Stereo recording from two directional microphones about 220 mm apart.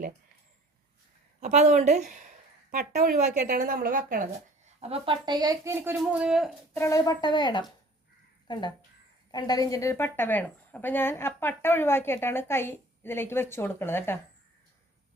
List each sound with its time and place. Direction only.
1.4 s a woman's voice: 30° right (ahead or behind); by 6.5 s 5° right (ahead or behind)
6.7 s a woman's voice: 15° left (ahead or behind)